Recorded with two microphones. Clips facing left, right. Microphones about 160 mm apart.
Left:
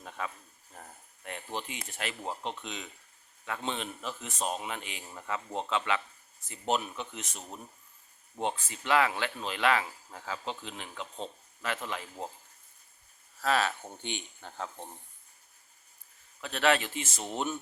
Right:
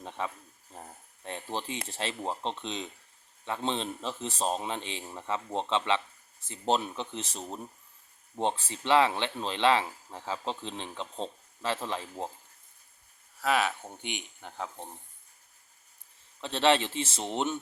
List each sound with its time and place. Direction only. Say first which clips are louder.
0.0 s speech: right 3 dB; 30° right (ahead or behind)
13.4 s speech: right 1 dB; 10° right (ahead or behind)
16.4 s speech: right 2 dB; 30° right (ahead or behind)